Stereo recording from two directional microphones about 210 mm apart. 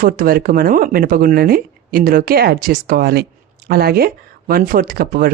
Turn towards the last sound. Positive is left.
turn(degrees=-45)  # may be behind; listen again after turning